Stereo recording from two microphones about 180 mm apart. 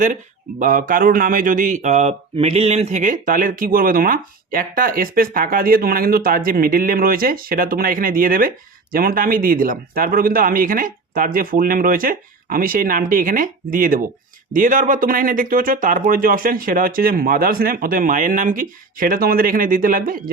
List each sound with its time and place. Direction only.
0.6 s speech: 50° right (ahead or behind)